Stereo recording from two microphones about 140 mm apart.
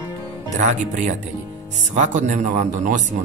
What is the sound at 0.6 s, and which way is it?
Speech, 65° right (ahead or behind).